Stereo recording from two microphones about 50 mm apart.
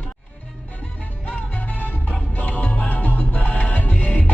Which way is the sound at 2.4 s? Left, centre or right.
Left.